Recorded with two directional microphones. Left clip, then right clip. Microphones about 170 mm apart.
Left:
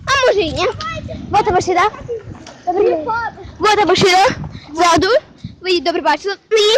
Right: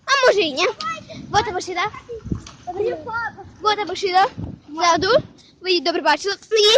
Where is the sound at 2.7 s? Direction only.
45° left (ahead or behind).